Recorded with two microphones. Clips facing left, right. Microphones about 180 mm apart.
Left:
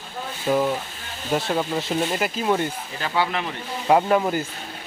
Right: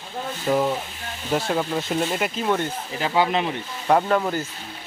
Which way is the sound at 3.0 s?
20° right (ahead or behind).